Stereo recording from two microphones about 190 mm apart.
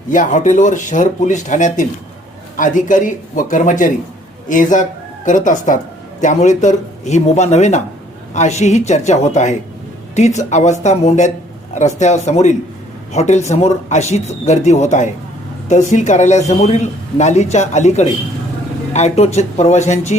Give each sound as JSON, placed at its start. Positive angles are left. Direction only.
{"t": 0.1, "sound": "a man's voice", "side_deg": 40}